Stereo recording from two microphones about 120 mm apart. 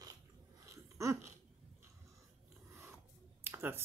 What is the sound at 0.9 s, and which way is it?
Laughter, 25° right (ahead or behind).